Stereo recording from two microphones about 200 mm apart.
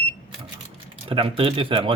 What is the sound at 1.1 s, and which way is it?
Speech, 25° right (ahead or behind).